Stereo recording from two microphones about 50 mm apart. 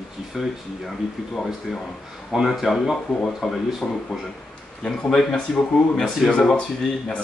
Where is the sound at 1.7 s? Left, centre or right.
Centre.